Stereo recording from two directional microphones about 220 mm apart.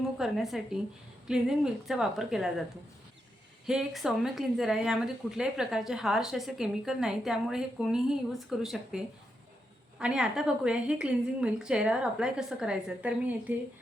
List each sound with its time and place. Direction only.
0.2 s speech: centre (ahead or behind)
3.7 s speech: centre (ahead or behind)